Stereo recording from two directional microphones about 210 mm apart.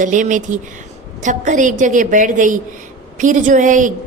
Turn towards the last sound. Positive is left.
turn(degrees=-40)  # may be behind; listen again after turning